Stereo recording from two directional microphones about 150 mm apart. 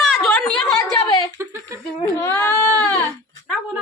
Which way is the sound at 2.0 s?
15° left (ahead or behind).